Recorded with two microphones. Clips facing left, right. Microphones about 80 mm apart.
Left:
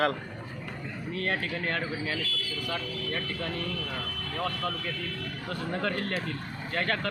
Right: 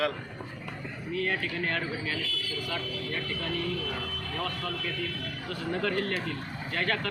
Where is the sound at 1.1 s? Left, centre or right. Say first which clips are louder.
Right 1 dB; left.